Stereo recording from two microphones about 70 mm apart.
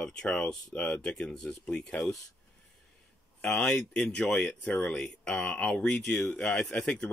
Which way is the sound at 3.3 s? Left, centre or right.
Centre.